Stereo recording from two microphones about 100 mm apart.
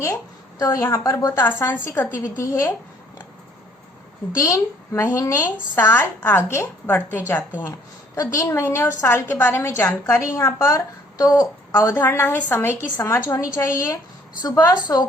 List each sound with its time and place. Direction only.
0.6 s a woman's voice: 30° left (ahead or behind)
1.4 s a woman's voice: 20° left (ahead or behind)
4.4 s a woman's voice: 35° left (ahead or behind)
5.7 s a woman's voice: 20° left (ahead or behind)
8.1 s a woman's voice: 35° left (ahead or behind)